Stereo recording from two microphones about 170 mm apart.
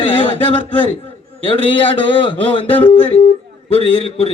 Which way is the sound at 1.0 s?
35° left (ahead or behind).